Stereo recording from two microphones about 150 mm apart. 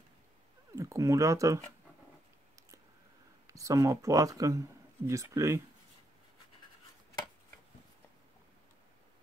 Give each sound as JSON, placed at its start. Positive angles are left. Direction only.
{"t": 0.7, "sound": "speech", "side_deg": -20}
{"t": 3.4, "sound": "speech", "side_deg": -20}